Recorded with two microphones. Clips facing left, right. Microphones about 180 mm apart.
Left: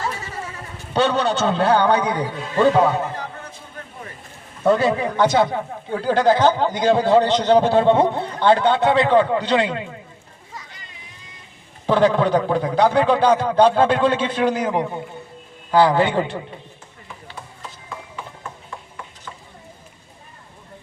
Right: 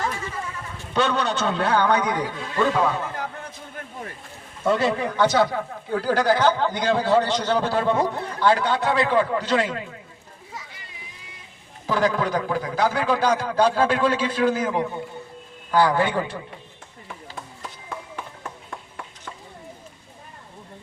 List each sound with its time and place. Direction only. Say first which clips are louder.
0.5 s a man's voice: left 3 dB; 35° left (ahead or behind)
4.6 s a man's voice: left 4 dB; 40° left (ahead or behind)
5.4 s speech: left 2 dB; 20° left (ahead or behind)
11.9 s speech: left 6 dB; 25° left (ahead or behind)